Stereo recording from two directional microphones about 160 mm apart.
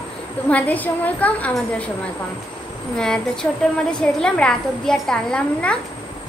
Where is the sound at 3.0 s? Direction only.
5° left (ahead or behind).